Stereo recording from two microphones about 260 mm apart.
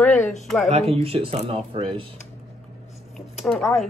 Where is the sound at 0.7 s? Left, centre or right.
Right.